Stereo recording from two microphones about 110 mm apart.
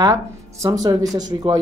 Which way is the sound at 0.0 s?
30° right (ahead or behind).